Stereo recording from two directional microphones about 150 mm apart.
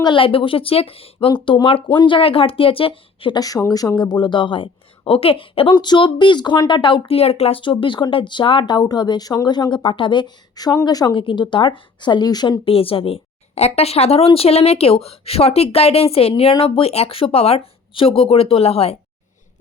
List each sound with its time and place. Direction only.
0.0 s speech: 35° left (ahead or behind)